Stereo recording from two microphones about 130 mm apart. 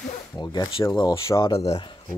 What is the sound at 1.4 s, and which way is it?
Speech, 45° left (ahead or behind).